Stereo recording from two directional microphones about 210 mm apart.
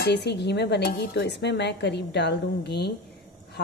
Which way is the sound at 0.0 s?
55° left (ahead or behind).